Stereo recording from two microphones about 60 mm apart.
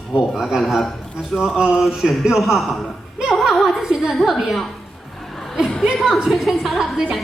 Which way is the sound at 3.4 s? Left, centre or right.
Centre.